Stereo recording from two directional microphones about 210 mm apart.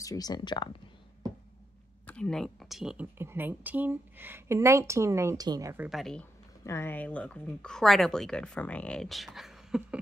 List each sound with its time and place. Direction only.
0.0 s speech: 15° left (ahead or behind)
2.0 s a woman's voice: 5° left (ahead or behind); by 5.9 s 15° right (ahead or behind)
5.9 s speech: centre (ahead or behind)
6.6 s speech: 10° left (ahead or behind); by 9.9 s 5° right (ahead or behind)